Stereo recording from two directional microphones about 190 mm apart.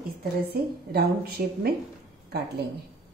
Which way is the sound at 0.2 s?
55° right (ahead or behind).